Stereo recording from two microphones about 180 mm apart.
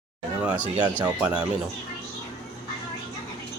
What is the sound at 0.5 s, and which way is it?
Speech, 25° right (ahead or behind).